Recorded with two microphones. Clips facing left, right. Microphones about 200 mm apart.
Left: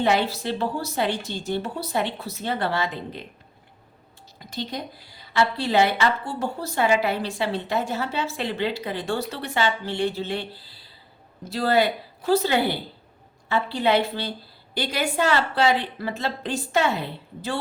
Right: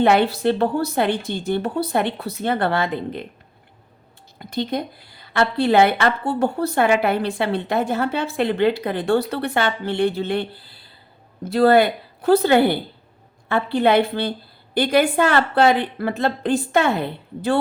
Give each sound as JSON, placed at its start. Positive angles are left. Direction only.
{"t": 0.0, "sound": "a woman's voice", "side_deg": -60}
{"t": 4.4, "sound": "a woman's voice", "side_deg": -55}